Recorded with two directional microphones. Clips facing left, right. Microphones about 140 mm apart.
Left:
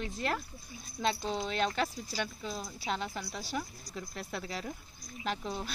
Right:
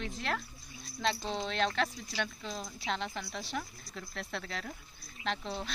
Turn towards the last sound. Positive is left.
turn(degrees=10)  # may be behind; listen again after turning